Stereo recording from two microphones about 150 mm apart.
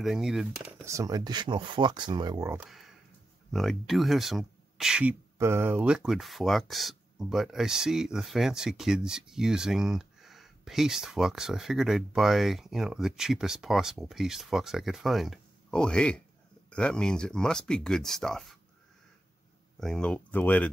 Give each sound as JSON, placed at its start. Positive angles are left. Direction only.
{"t": 0.0, "sound": "speech", "side_deg": 0}
{"t": 0.8, "sound": "speech", "side_deg": -20}
{"t": 2.6, "sound": "speech", "side_deg": 0}
{"t": 5.4, "sound": "speech", "side_deg": -15}
{"t": 19.8, "sound": "speech", "side_deg": 5}